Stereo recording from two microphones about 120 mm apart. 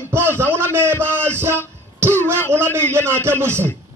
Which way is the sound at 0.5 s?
20° right (ahead or behind).